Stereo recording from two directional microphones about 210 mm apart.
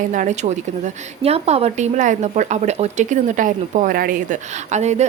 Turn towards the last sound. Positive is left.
turn(degrees=-35)  # may be behind; listen again after turning